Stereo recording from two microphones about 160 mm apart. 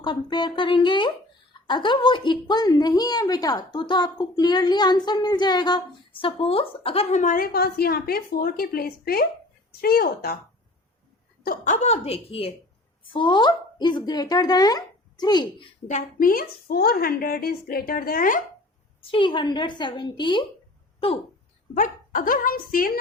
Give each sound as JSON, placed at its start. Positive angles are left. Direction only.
{"t": 0.0, "sound": "a woman's voice", "side_deg": 25}
{"t": 11.4, "sound": "a woman's voice", "side_deg": 50}
{"t": 15.9, "sound": "a woman's voice", "side_deg": 55}
{"t": 19.1, "sound": "a woman's voice", "side_deg": 30}
{"t": 21.8, "sound": "a woman's voice", "side_deg": 60}